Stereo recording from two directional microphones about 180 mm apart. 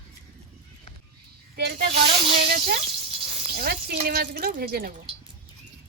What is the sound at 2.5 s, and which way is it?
Speech, 55° right (ahead or behind).